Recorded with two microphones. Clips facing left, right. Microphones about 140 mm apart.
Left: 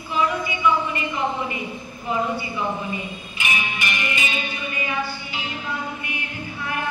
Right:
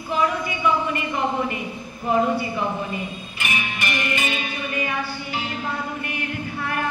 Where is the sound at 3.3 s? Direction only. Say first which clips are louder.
Left 1 dB; 45° right (ahead or behind).